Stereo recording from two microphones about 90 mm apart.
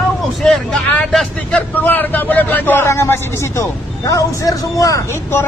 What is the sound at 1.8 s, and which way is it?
A man's voice, 20° left (ahead or behind).